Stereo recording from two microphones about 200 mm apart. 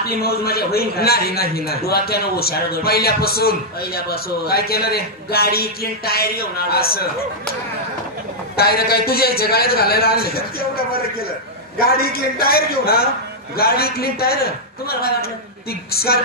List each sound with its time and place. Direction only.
0.0 s a man's voice: 50° left (ahead or behind)
8.5 s a man's voice: 50° left (ahead or behind)